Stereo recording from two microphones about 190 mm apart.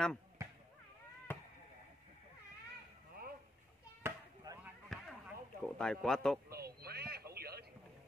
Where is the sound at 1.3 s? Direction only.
10° left (ahead or behind).